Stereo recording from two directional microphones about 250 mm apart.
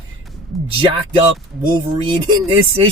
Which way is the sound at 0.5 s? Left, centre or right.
Centre.